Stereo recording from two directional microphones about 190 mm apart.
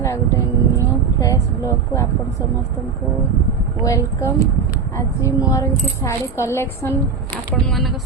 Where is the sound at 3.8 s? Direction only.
15° left (ahead or behind).